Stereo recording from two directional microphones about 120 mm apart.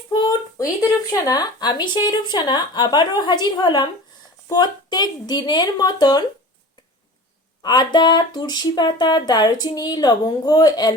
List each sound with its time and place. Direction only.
0.1 s a sound: 35° left (ahead or behind)
1.2 s speech: 30° left (ahead or behind)
7.6 s speech: 35° left (ahead or behind)